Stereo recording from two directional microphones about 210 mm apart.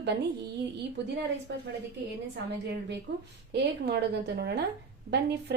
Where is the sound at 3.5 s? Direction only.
50° right (ahead or behind).